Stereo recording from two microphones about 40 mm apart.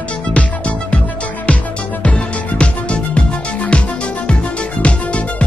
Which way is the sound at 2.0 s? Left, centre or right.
Left.